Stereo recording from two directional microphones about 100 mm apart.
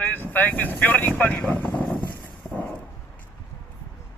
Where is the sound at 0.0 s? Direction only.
20° left (ahead or behind).